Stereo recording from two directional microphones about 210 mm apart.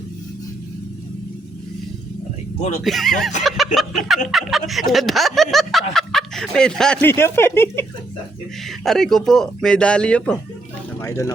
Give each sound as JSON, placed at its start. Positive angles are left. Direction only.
{"t": 2.6, "sound": "speech", "side_deg": 35}
{"t": 2.8, "sound": "speech", "side_deg": 0}
{"t": 8.8, "sound": "speech", "side_deg": 0}